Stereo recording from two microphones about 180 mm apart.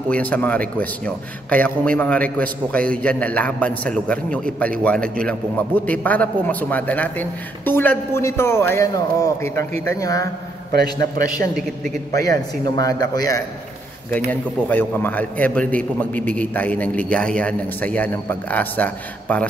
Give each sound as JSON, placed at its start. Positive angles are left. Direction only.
{"t": 0.1, "sound": "a man's voice", "side_deg": 10}
{"t": 12.1, "sound": "a man's voice", "side_deg": -60}
{"t": 12.6, "sound": "a man's voice", "side_deg": 20}
{"t": 14.3, "sound": "a man's voice", "side_deg": 10}